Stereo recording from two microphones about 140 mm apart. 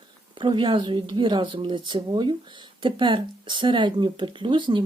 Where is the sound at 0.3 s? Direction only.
35° right (ahead or behind).